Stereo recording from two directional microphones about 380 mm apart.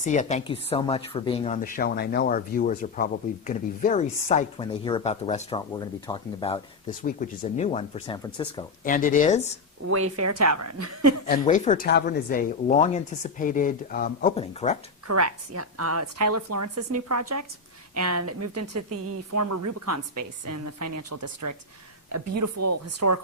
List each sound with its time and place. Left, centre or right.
0.0 s speech: centre
9.9 s a woman's voice: right
11.3 s speech: centre
15.0 s a woman's voice: right